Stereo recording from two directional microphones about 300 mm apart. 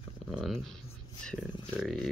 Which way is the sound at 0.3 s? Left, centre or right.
Centre.